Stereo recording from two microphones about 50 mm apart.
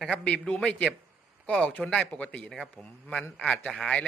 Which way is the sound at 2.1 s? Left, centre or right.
Left.